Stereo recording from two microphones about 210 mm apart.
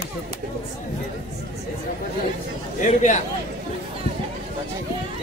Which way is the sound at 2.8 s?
35° left (ahead or behind).